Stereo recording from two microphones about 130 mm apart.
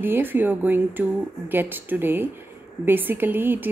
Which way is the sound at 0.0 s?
15° right (ahead or behind).